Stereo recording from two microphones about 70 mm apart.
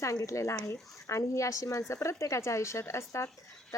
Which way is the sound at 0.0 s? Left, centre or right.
Left.